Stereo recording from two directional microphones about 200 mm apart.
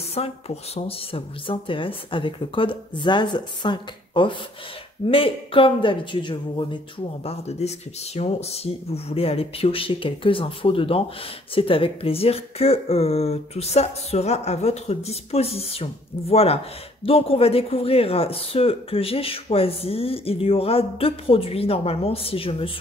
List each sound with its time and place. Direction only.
0.2 s speech: 30° left (ahead or behind)